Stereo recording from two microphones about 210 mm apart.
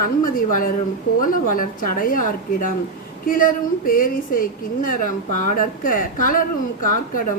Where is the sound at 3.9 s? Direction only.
40° left (ahead or behind).